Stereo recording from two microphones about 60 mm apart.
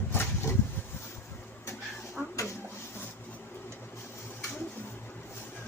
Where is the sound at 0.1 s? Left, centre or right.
Left.